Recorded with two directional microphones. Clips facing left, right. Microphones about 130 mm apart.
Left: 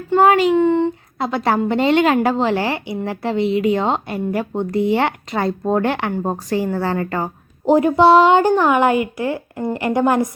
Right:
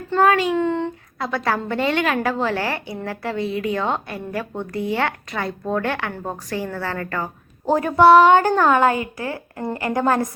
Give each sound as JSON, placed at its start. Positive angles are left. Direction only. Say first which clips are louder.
{"t": 0.1, "sound": "a woman's voice", "louder": "left 4 dB", "side_deg": 25}
{"t": 8.5, "sound": "a woman's voice", "louder": "left 2 dB", "side_deg": 15}